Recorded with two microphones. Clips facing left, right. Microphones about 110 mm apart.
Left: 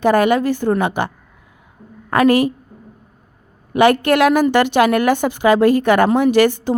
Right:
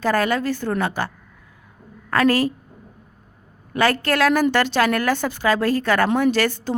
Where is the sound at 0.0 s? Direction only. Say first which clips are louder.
Left 6 dB; 15° left (ahead or behind).